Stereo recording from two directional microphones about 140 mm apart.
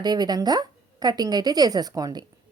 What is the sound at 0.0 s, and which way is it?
A woman's voice, 30° right (ahead or behind).